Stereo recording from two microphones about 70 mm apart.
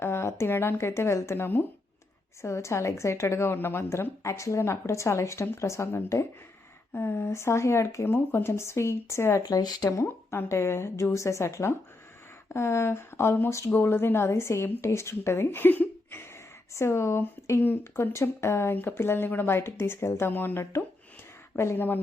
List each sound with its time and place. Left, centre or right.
0.0 s a woman's voice: left
6.9 s speech: left
8.1 s speech: left
8.4 s speech: left
9.4 s speech: left
10.0 s speech: left
13.5 s a woman's voice: left
13.7 s speech: left
16.7 s speech: left